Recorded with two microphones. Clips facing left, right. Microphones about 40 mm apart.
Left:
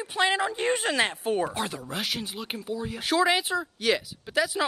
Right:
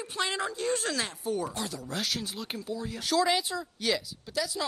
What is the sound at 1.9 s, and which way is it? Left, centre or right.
Speech, centre.